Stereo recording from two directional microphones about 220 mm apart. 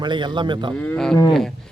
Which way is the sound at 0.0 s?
20° right (ahead or behind).